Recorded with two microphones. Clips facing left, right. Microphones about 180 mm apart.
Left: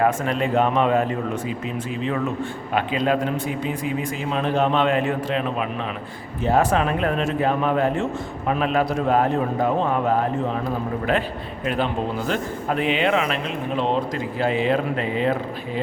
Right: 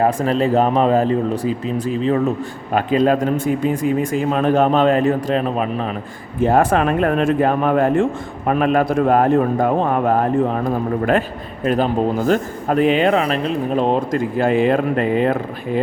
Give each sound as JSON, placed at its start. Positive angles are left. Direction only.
{"t": 0.0, "sound": "speech", "side_deg": -35}
{"t": 6.4, "sound": "speech", "side_deg": -55}